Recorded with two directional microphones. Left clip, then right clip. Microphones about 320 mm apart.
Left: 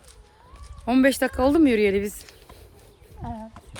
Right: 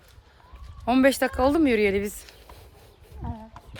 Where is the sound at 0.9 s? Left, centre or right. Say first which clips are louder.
Even; centre.